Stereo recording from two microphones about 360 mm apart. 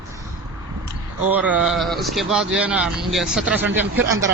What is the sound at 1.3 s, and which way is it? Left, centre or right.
Speech, centre.